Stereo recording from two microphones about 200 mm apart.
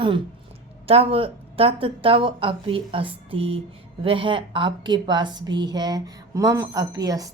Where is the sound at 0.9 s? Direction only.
30° right (ahead or behind).